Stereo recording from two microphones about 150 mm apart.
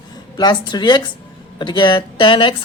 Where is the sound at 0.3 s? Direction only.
30° left (ahead or behind).